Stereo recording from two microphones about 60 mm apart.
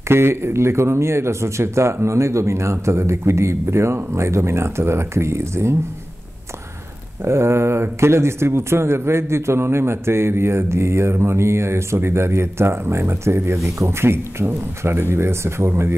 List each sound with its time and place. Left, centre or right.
0.1 s a man's voice: right
7.2 s a man's voice: right